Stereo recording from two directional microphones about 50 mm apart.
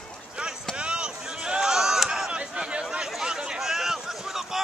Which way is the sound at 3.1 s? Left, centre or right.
Centre.